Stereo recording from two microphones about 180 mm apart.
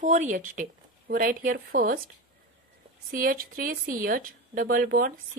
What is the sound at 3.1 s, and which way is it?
A woman's voice, 50° right (ahead or behind).